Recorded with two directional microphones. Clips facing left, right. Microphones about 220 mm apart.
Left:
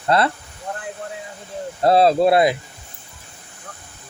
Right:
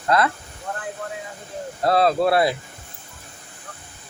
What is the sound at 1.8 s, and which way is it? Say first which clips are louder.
Speech: left 4 dB; 25° left (ahead or behind).